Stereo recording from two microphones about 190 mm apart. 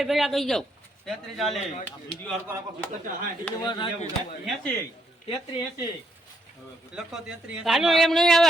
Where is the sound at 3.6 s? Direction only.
25° left (ahead or behind).